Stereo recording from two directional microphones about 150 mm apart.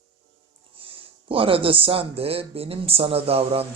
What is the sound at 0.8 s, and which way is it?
Speech, 35° right (ahead or behind).